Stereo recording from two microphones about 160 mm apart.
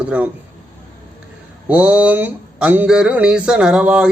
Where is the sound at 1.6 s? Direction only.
10° right (ahead or behind).